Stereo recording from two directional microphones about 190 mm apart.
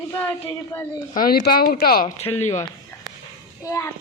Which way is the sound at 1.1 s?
50° left (ahead or behind).